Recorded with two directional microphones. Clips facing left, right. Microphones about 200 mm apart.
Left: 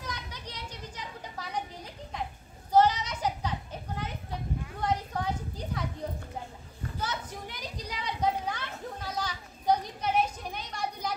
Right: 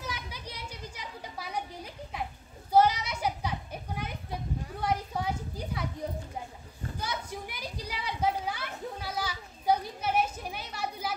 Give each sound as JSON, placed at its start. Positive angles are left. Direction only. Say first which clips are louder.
{"t": 0.0, "sound": "children playing", "louder": "right 1 dB", "side_deg": -10}
{"t": 7.0, "sound": "children playing", "louder": "even", "side_deg": -10}